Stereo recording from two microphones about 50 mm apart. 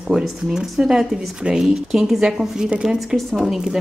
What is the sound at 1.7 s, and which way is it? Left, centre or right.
A woman's voice, centre.